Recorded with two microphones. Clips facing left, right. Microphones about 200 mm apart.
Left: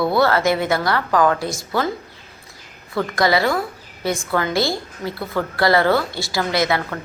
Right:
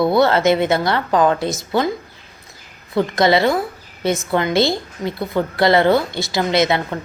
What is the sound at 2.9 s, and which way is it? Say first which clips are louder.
A woman's voice: right 3 dB; 20° right (ahead or behind).